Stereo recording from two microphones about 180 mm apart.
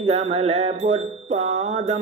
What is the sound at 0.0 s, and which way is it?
Mantra, 35° right (ahead or behind).